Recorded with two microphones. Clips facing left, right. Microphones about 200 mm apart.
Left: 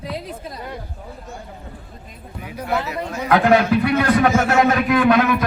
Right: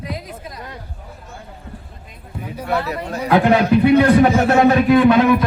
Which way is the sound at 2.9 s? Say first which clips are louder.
Right 2 dB; 35° right (ahead or behind).